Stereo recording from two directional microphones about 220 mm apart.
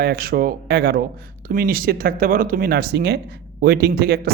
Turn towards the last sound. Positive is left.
turn(degrees=-45)  # may be behind; listen again after turning